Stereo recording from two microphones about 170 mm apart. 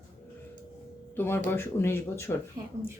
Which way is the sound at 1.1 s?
15° left (ahead or behind).